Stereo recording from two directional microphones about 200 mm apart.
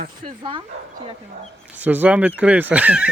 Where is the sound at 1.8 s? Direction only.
10° right (ahead or behind).